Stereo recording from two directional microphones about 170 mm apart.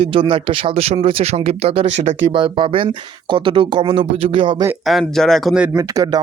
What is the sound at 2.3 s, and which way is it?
Speech, 30° right (ahead or behind).